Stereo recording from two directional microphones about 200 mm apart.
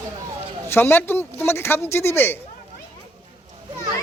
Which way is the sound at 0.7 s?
10° left (ahead or behind).